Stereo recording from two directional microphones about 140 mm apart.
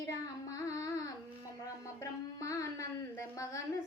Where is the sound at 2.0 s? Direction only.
25° left (ahead or behind).